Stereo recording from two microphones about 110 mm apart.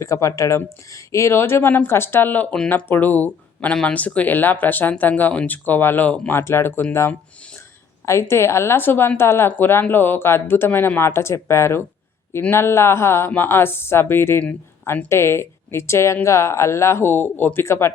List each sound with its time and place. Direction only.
0.0 s a woman's voice: 30° left (ahead or behind)
8.0 s a woman's voice: 25° left (ahead or behind)